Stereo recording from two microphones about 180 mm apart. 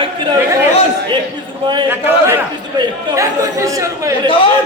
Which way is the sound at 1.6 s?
25° right (ahead or behind).